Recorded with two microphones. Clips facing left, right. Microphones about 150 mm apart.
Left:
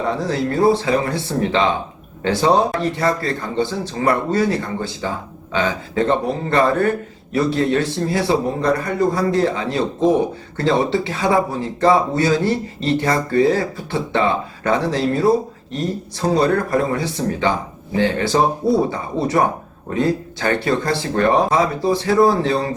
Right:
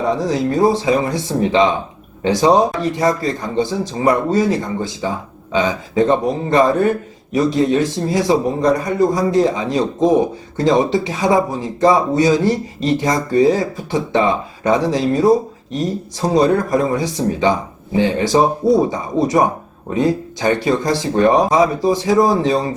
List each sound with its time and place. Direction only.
0.3 s speech: 15° right (ahead or behind)